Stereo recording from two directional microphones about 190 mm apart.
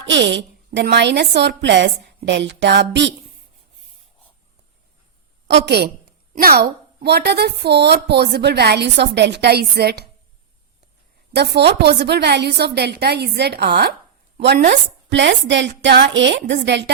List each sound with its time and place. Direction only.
0.0 s a woman's voice: 70° right (ahead or behind)
5.5 s a woman's voice: 65° right (ahead or behind)
11.3 s a woman's voice: 60° right (ahead or behind)
15.1 s a woman's voice: 70° right (ahead or behind)